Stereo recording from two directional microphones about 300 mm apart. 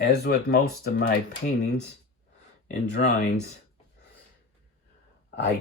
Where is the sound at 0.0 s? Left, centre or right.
Left.